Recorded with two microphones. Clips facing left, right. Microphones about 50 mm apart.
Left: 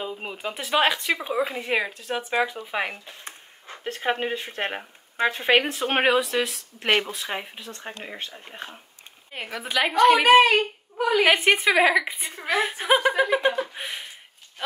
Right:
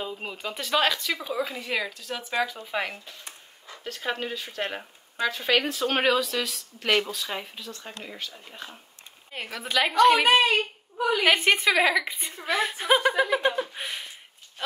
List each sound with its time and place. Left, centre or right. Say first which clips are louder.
0.0 s speech: left 2 dB; centre
3.3 s a sound: left 4 dB; left
3.8 s speech: left 5 dB; left
9.3 s a woman's voice: even; centre
9.9 s speech: left 3 dB; left
10.4 s speech: left 4 dB; left
11.2 s a woman's voice: even; centre